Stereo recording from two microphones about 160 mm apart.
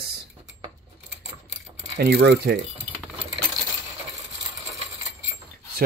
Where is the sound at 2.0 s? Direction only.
90° right.